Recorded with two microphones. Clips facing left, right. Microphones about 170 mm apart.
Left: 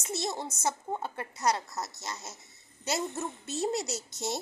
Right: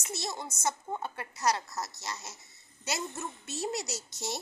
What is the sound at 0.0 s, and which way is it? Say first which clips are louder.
A woman's voice: left 4 dB; 25° left (ahead or behind).